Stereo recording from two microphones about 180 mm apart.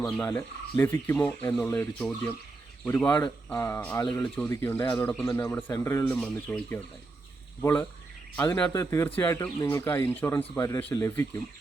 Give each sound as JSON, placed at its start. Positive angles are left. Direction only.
{"t": 0.3, "sound": "speech", "side_deg": 15}